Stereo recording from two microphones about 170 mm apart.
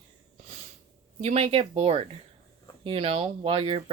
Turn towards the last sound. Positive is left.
turn(degrees=-35)  # may be behind; listen again after turning